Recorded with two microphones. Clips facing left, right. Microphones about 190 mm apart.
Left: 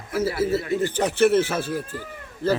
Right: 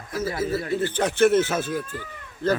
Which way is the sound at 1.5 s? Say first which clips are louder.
Even; 35° left (ahead or behind).